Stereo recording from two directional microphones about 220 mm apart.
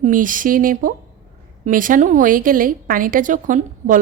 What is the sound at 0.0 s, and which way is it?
Speech, 35° right (ahead or behind).